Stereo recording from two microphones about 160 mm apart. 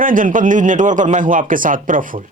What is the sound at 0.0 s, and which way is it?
A man's voice, 55° right (ahead or behind).